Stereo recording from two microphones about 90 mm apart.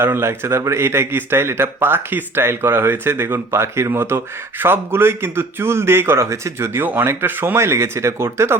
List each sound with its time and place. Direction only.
0.0 s speech: 25° right (ahead or behind)